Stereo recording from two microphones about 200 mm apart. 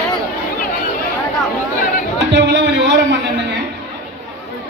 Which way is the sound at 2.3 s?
60° right (ahead or behind).